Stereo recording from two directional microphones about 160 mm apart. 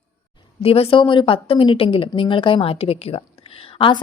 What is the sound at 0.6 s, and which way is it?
Speech, 35° left (ahead or behind).